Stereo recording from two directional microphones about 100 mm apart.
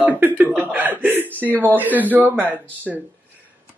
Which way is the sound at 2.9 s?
Centre (ahead or behind).